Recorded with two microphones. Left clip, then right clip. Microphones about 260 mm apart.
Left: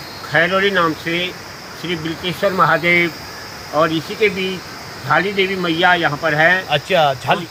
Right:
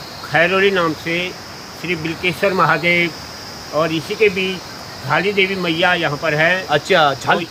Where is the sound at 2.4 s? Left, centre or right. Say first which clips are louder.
Left 1 dB; centre.